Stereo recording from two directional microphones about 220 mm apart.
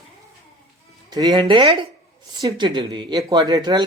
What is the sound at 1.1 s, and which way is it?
Speech, 20° right (ahead or behind).